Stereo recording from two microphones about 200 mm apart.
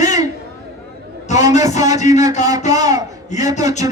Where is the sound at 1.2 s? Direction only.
35° left (ahead or behind).